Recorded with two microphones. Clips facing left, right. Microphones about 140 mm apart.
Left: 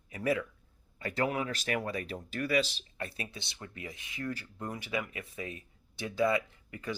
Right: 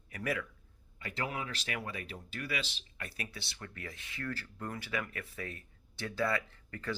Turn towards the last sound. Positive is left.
turn(degrees=15)  # may be behind; listen again after turning